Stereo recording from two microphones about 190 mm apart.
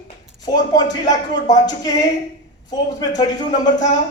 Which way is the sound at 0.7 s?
20° left (ahead or behind).